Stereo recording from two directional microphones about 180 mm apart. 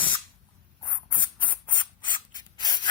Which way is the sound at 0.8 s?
25° left (ahead or behind).